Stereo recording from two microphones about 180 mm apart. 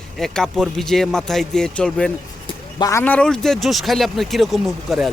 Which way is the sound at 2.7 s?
20° left (ahead or behind).